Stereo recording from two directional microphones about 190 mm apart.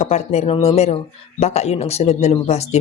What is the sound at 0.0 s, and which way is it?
Speech, 35° left (ahead or behind).